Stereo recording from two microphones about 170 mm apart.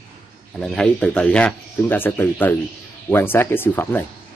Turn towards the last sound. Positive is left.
turn(degrees=15)  # may be behind; listen again after turning